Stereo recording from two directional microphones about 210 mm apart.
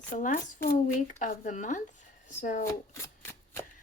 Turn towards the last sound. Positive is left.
turn(degrees=15)  # may be behind; listen again after turning